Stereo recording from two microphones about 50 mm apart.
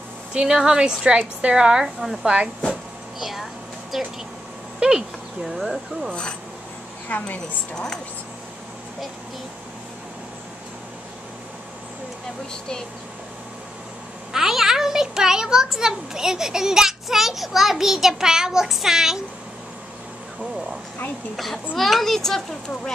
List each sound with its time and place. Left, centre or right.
0.3 s a woman's voice: centre
3.2 s a woman's voice: centre
4.7 s speech: centre
5.4 s a child's voice: centre
7.1 s a woman's voice: left
7.7 s a woman's voice: centre
14.3 s a child's voice: centre
21.4 s a child's voice: centre